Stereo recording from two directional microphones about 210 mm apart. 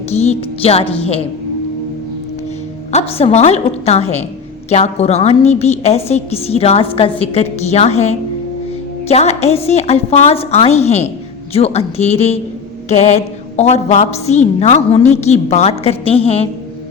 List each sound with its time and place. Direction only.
0.1 s a woman's voice: 30° left (ahead or behind)
2.9 s a woman's voice: 30° left (ahead or behind)